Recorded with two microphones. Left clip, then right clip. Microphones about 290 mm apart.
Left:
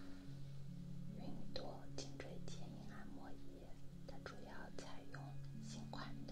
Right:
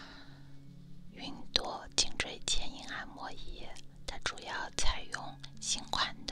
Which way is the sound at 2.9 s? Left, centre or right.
Right.